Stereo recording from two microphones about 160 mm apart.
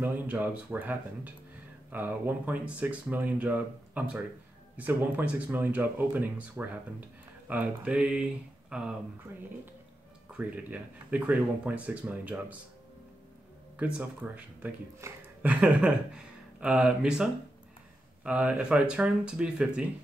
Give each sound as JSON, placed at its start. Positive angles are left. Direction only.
{"t": 0.0, "sound": "speech", "side_deg": -10}
{"t": 10.3, "sound": "speech", "side_deg": -10}
{"t": 13.7, "sound": "speech", "side_deg": -10}
{"t": 16.5, "sound": "speech", "side_deg": -5}